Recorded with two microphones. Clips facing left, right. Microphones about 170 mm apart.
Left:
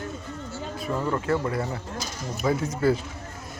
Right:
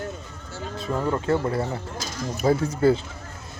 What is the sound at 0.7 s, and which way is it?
Speech, 25° right (ahead or behind).